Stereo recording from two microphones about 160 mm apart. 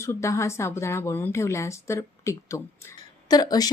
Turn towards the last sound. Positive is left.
turn(degrees=25)  # may be behind; listen again after turning